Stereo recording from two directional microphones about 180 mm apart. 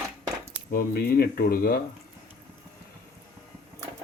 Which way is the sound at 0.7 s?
55° left (ahead or behind).